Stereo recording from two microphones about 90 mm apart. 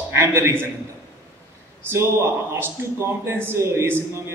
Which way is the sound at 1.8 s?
30° right (ahead or behind).